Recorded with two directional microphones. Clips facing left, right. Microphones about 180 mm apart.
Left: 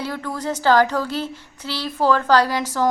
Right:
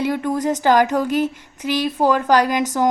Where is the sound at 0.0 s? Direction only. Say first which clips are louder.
Right 7 dB; 20° right (ahead or behind).